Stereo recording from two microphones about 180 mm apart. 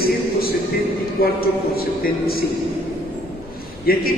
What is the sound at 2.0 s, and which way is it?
Speech, 55° left (ahead or behind).